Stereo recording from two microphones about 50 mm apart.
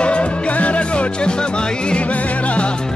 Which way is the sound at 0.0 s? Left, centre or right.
Left.